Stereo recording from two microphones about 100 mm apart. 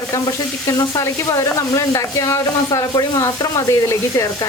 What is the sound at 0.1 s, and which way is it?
Sizzle, 35° left (ahead or behind).